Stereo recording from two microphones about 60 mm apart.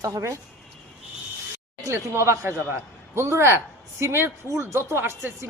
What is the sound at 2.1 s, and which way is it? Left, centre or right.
A man's voice, right.